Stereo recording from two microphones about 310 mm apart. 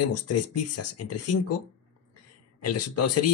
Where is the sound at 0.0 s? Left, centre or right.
Left.